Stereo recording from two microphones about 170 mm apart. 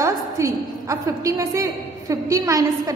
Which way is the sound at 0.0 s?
20° right (ahead or behind).